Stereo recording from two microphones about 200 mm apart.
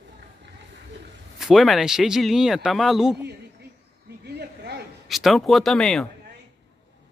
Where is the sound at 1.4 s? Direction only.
Centre (ahead or behind).